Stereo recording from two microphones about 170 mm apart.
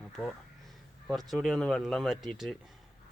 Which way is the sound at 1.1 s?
Centre (ahead or behind).